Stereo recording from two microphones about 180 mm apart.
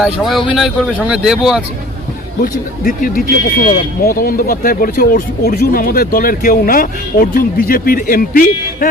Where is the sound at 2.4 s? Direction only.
50° left (ahead or behind).